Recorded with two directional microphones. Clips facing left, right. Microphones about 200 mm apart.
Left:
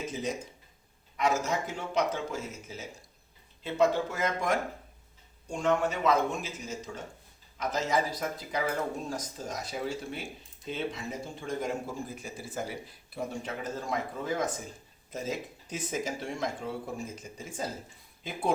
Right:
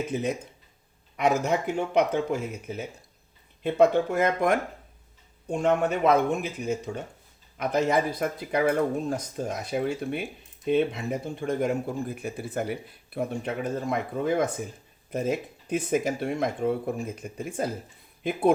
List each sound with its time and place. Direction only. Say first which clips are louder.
0.1 s speech: right 6 dB; 60° right (ahead or behind)